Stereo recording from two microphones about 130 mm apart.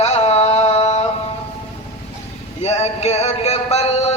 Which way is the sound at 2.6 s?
55° left (ahead or behind).